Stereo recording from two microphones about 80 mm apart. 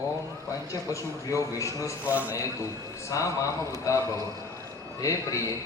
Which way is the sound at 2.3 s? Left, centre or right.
Left.